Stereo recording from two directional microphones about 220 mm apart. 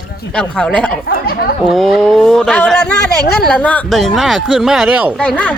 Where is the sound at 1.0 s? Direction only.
45° left (ahead or behind).